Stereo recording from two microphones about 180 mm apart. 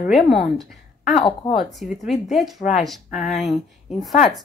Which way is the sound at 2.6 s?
40° left (ahead or behind).